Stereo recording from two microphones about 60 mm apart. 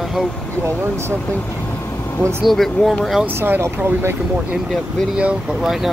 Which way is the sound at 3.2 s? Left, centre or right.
Right.